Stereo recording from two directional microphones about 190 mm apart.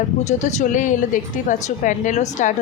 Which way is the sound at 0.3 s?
40° left (ahead or behind).